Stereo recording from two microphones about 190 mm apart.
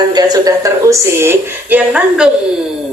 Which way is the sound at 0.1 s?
20° right (ahead or behind).